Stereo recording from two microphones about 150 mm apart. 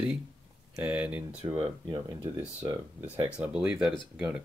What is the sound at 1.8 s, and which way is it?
Speech, 25° right (ahead or behind).